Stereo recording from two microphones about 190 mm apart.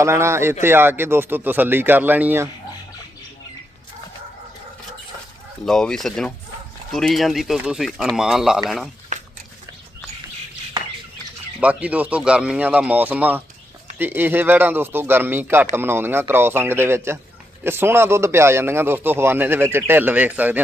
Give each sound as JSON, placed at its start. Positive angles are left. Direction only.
{"t": 0.0, "sound": "a man's voice", "side_deg": -15}
{"t": 5.6, "sound": "speech", "side_deg": 5}
{"t": 11.6, "sound": "a man's voice", "side_deg": -5}